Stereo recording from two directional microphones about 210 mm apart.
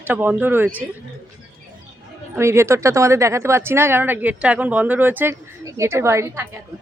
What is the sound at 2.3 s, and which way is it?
A woman's voice, 10° right (ahead or behind).